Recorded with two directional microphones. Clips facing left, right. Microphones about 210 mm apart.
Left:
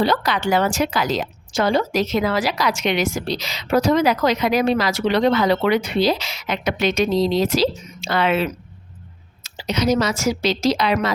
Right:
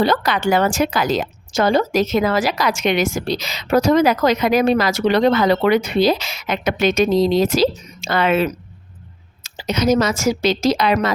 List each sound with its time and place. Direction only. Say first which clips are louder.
0.0 s a woman's voice: right 2 dB; 50° right (ahead or behind)